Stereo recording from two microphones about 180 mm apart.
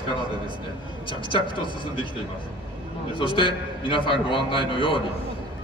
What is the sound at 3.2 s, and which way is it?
A man's voice, 30° left (ahead or behind).